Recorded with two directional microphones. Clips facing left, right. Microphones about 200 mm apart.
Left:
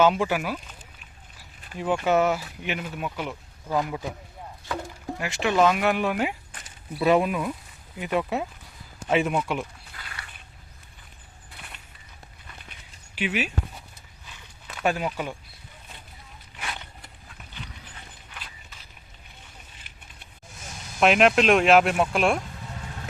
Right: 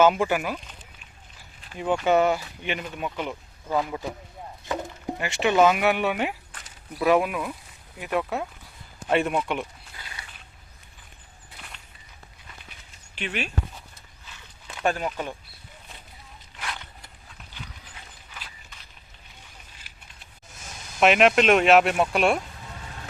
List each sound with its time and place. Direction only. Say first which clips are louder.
0.0 s speech: right 1 dB; centre (ahead or behind)
1.8 s speech: right 1 dB; centre (ahead or behind)
5.1 s speech: right 2 dB; centre (ahead or behind)
9.9 s a sound: left 1 dB; 20° right (ahead or behind)
13.1 s speech: left 4 dB; 5° left (ahead or behind)
14.8 s speech: even; 10° left (ahead or behind)
21.0 s speech: even; centre (ahead or behind)